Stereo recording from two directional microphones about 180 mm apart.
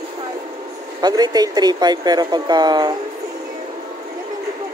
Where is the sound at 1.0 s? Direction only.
20° right (ahead or behind).